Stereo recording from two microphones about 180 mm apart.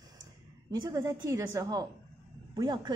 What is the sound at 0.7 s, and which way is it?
A woman's voice, 20° right (ahead or behind).